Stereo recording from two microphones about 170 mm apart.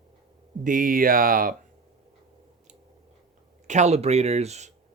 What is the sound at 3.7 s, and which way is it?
Speech, 40° right (ahead or behind).